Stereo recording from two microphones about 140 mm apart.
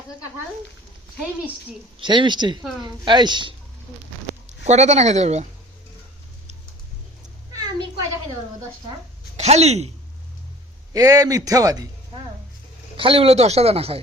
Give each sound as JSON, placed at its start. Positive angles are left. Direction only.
{"t": 2.0, "sound": "speech", "side_deg": -35}
{"t": 4.6, "sound": "speech", "side_deg": -55}
{"t": 7.5, "sound": "a sound", "side_deg": -30}
{"t": 9.4, "sound": "speech", "side_deg": -50}
{"t": 10.9, "sound": "a man's voice", "side_deg": -25}
{"t": 13.0, "sound": "speech", "side_deg": -40}